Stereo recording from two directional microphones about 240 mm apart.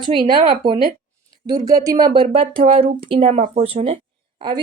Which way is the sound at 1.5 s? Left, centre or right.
Centre.